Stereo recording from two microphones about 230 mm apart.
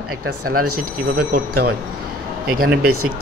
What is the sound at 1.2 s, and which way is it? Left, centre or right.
Speech, right.